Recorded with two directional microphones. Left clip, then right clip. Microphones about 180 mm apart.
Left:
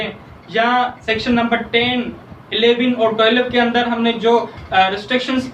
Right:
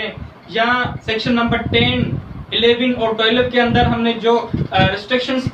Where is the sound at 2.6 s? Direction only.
15° left (ahead or behind).